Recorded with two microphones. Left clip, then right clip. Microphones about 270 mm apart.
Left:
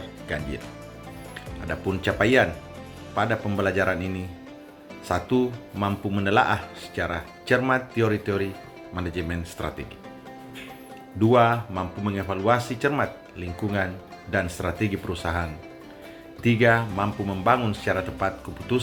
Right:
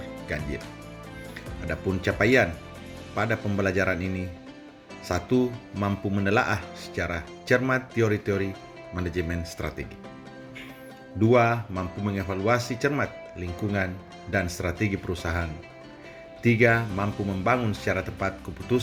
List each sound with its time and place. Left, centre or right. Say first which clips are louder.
1.6 s speech: left 1 dB; right
11.2 s speech: left 2 dB; right